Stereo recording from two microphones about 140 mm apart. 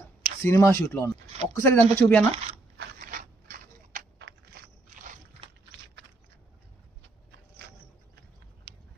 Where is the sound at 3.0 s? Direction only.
75° right (ahead or behind).